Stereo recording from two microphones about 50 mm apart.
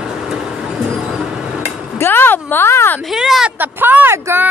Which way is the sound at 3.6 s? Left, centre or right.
Right.